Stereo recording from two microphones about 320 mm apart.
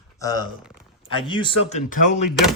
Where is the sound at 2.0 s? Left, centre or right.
Left.